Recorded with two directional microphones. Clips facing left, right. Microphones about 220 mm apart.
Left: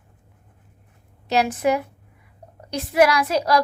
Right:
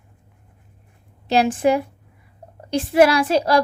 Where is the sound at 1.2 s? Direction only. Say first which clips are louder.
Right 3 dB; 30° right (ahead or behind).